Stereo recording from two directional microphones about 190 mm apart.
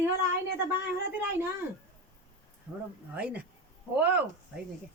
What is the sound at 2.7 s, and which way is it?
Speech, 5° right (ahead or behind).